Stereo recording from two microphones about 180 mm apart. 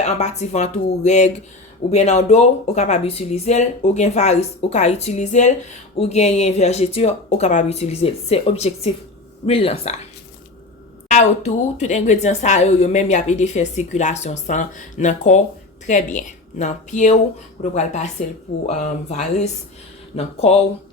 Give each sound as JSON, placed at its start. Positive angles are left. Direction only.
{"t": 0.0, "sound": "speech", "side_deg": 40}
{"t": 11.1, "sound": "speech", "side_deg": 40}